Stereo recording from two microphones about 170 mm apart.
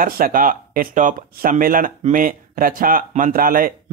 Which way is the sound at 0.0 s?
55° right (ahead or behind).